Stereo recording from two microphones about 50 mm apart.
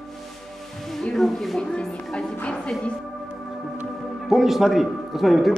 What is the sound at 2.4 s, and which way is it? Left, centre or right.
Music, left.